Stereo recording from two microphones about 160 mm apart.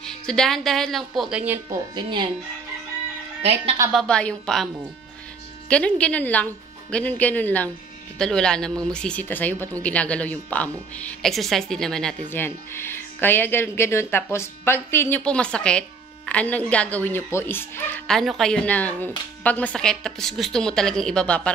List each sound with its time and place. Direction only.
0.0 s a woman's voice: 5° left (ahead or behind)
2.0 s speech: 30° right (ahead or behind)
3.9 s a woman's voice: 5° left (ahead or behind)
5.7 s a woman's voice: 5° left (ahead or behind)